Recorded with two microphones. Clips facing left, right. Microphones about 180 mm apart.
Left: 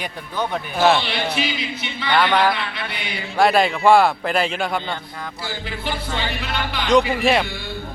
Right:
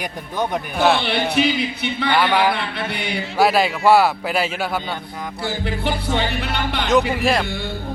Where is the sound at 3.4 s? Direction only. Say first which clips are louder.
Left 1 dB; 5° right (ahead or behind).